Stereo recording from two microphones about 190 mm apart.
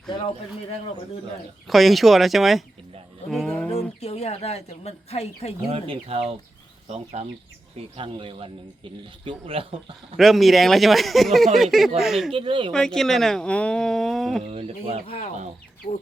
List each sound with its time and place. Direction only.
0.1 s speech: 30° left (ahead or behind)
1.6 s speech: centre (ahead or behind)
3.2 s a sound: 5° left (ahead or behind)
4.0 s speech: 35° left (ahead or behind)
5.7 s speech: 30° right (ahead or behind)
10.2 s speech: centre (ahead or behind)
12.3 s speech: 25° right (ahead or behind)
12.7 s speech: 5° left (ahead or behind)
14.4 s speech: 30° right (ahead or behind)
15.0 s speech: 30° left (ahead or behind)